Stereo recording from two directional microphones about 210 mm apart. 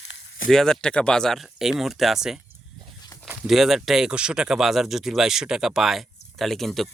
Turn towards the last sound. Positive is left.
turn(degrees=0)  # may be behind; listen again after turning